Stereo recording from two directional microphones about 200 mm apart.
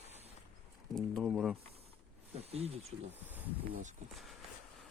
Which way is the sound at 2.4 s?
30° right (ahead or behind).